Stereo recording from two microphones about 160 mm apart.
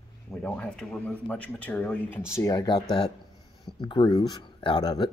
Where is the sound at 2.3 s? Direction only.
20° left (ahead or behind).